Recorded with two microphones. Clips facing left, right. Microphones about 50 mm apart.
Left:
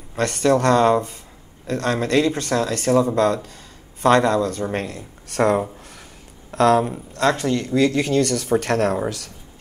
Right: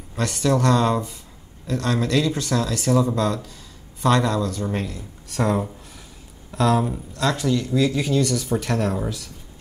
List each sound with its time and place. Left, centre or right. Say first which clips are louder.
0.2 s speech: left 3 dB; left
4.7 s speech: left 2 dB; left
7.2 s speech: left 3 dB; left